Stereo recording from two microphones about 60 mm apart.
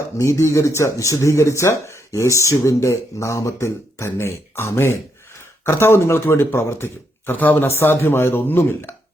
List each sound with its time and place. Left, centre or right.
0.2 s speech: left
7.3 s speech: left